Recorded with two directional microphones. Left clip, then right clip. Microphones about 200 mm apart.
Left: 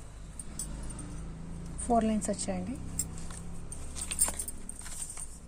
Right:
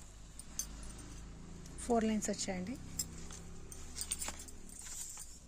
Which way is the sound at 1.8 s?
20° right (ahead or behind).